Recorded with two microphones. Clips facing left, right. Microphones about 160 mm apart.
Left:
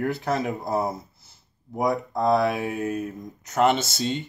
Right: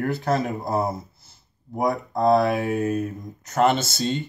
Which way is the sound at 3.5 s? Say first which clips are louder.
Right 1 dB; 20° left (ahead or behind).